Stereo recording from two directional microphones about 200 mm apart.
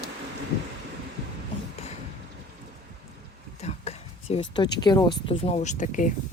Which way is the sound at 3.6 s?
30° left (ahead or behind).